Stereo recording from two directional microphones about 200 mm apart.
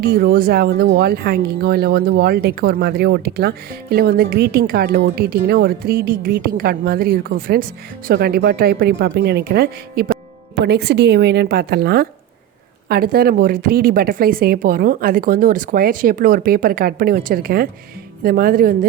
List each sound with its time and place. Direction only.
0.0 s a woman's voice: 50° right (ahead or behind)